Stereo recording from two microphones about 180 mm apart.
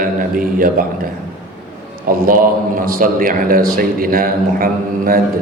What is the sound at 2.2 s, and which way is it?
A man's voice, 50° right (ahead or behind).